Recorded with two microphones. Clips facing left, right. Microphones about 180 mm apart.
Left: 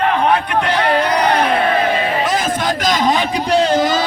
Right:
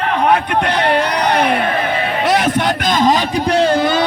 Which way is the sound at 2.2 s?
70° right (ahead or behind).